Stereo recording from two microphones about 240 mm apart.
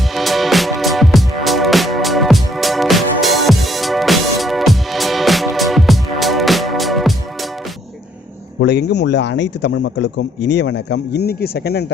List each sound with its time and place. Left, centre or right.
0.1 s music: centre
8.6 s a man's voice: left